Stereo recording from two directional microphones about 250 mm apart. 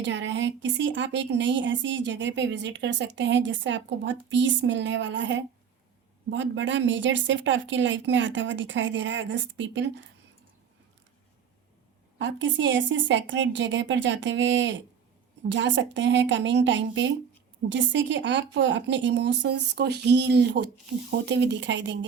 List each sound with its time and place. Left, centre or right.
0.0 s a woman's voice: right
12.2 s a woman's voice: right